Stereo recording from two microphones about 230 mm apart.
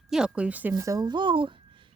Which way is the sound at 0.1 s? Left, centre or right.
Centre.